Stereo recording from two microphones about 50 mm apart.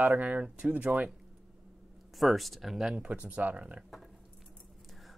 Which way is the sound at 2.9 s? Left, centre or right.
Right.